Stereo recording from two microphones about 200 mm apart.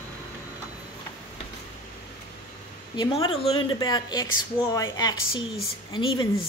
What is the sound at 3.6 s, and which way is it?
A woman's voice, 20° left (ahead or behind).